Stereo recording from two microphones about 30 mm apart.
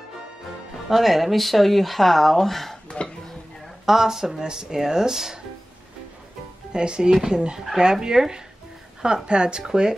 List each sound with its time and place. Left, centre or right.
0.8 s speech: centre
3.8 s speech: centre
6.7 s speech: right